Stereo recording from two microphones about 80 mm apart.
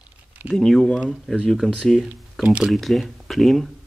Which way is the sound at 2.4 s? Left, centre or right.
Centre.